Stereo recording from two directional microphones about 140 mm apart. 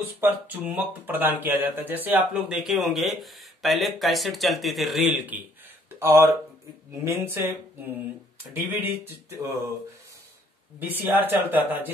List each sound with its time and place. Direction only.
0.2 s speech: 15° right (ahead or behind)
10.8 s speech: 15° right (ahead or behind)